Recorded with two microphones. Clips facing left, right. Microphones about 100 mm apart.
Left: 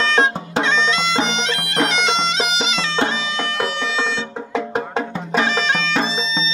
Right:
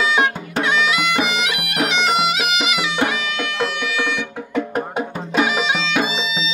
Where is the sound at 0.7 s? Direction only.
10° right (ahead or behind).